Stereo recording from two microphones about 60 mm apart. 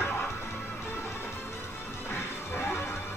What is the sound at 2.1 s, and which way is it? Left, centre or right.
Smash, left.